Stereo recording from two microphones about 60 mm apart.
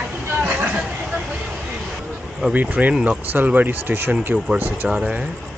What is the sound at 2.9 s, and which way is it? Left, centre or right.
Speech, centre.